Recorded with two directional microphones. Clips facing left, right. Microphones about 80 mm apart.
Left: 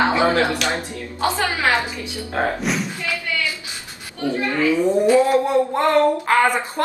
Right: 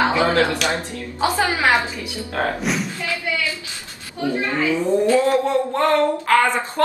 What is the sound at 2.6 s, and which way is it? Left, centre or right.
Speech, centre.